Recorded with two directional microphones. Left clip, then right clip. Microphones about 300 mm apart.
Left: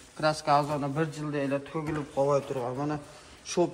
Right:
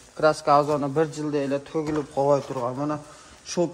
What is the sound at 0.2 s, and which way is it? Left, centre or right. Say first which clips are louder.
A man's voice: right 6 dB; right.